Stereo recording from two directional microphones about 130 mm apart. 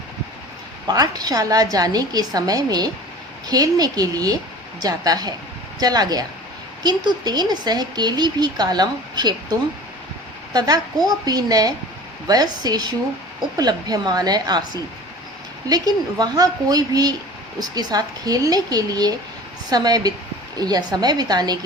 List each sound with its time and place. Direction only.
0.9 s a woman's voice: 30° right (ahead or behind)
15.7 s a woman's voice: 30° right (ahead or behind)